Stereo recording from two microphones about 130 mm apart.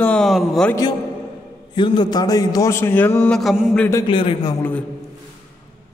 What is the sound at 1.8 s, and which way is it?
A man's voice, 35° left (ahead or behind).